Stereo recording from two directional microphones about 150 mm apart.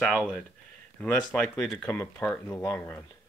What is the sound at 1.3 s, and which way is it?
Speech, 10° left (ahead or behind).